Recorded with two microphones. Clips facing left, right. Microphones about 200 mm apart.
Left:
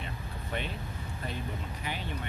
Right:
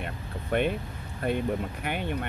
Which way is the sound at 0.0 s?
55° right (ahead or behind).